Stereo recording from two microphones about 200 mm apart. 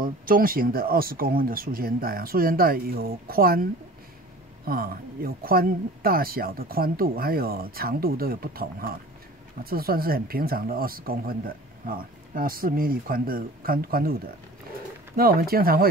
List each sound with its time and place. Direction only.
0.0 s speech: 45° right (ahead or behind)
4.6 s speech: 50° right (ahead or behind)